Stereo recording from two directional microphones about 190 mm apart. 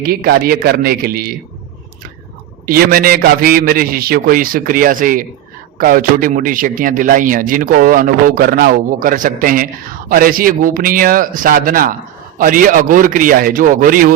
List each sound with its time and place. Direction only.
0.0 s a man's voice: 55° right (ahead or behind)
2.6 s a man's voice: 50° right (ahead or behind)